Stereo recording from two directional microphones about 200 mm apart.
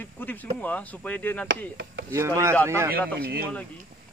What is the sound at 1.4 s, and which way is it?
Chop, 65° right (ahead or behind).